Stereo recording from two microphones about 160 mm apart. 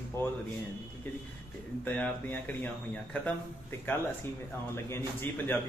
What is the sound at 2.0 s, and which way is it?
A man's voice, 10° left (ahead or behind).